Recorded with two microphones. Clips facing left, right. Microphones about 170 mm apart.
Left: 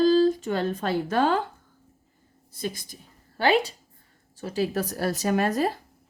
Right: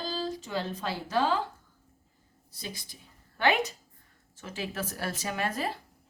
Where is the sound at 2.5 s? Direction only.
50° left (ahead or behind).